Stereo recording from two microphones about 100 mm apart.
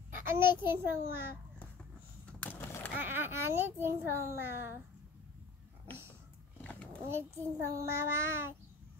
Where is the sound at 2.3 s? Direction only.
15° left (ahead or behind).